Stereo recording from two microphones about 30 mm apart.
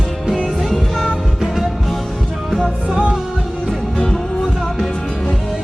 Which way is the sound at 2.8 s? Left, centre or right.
Right.